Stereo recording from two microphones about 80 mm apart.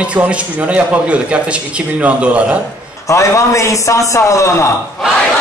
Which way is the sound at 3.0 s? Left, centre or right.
Left.